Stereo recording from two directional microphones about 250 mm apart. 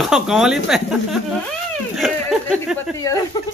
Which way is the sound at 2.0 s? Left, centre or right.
Centre.